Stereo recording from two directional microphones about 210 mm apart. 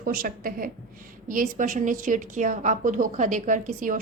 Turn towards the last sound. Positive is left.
turn(degrees=-40)  # may be behind; listen again after turning